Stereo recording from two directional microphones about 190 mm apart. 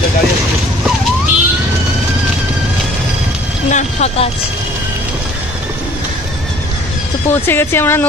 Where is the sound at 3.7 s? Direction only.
35° left (ahead or behind).